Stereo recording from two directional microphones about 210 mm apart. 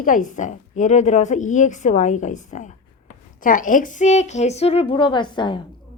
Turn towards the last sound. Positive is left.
turn(degrees=20)  # may be behind; listen again after turning